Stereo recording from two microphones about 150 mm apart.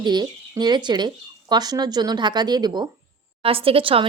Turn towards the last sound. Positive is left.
turn(degrees=-35)  # may be behind; listen again after turning